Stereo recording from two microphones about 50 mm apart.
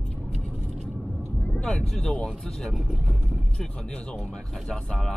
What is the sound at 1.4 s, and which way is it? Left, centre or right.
Vehicle, left.